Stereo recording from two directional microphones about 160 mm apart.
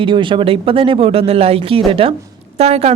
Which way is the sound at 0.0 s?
30° right (ahead or behind).